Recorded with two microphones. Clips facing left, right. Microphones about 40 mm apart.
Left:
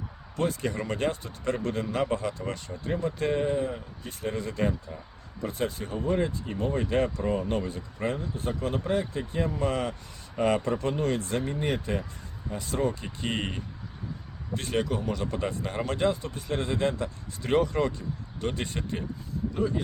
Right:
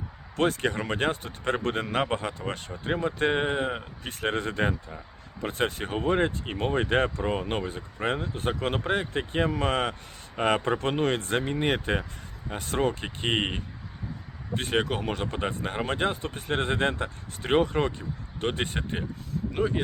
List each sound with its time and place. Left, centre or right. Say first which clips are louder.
0.3 s speech: right 3 dB; right
8.0 s speech: right 2 dB; right
19.1 s vehicle: right 2 dB; right